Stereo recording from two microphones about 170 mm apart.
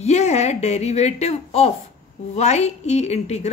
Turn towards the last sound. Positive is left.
turn(degrees=40)  # may be behind; listen again after turning